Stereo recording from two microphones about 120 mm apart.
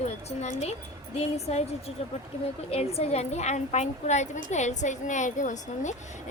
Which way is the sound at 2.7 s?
60° left (ahead or behind).